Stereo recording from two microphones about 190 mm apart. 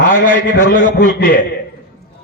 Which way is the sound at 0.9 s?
55° left (ahead or behind).